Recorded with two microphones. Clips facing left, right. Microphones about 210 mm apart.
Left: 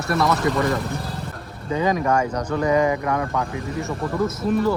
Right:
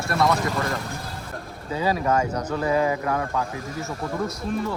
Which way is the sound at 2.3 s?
10° right (ahead or behind).